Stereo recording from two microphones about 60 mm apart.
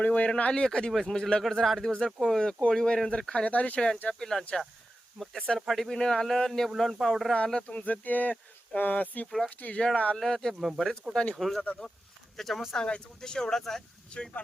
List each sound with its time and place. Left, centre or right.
0.0 s speech: left; by 2.3 s centre
2.3 s speech: centre
4.1 s speech: centre
5.5 s speech: centre
7.3 s speech: centre
9.7 s speech: centre
10.2 s speech: centre
12.8 s speech: centre